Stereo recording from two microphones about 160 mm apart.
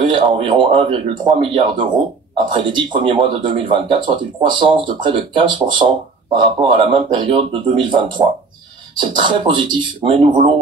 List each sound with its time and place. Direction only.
0.0 s speech: 30° right (ahead or behind)